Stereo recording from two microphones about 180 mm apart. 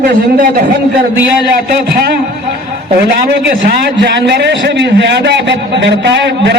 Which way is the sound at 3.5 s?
60° right (ahead or behind).